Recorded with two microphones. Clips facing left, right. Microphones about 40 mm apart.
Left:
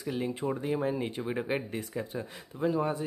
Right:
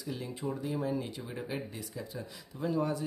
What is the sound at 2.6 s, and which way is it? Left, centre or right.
Speech, left.